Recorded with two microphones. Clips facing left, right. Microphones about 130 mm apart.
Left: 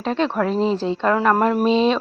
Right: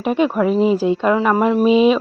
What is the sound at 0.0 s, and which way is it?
A woman's voice, 10° right (ahead or behind).